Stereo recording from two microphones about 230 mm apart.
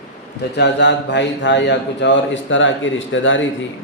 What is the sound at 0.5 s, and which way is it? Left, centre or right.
A man's voice, left.